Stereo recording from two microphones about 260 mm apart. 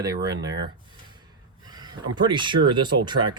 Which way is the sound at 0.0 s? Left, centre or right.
Centre.